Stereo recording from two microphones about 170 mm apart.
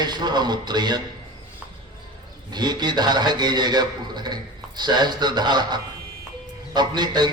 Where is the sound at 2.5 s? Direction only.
25° right (ahead or behind).